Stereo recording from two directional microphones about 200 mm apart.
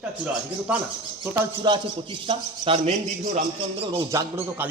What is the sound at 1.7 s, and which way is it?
Speech, 25° right (ahead or behind).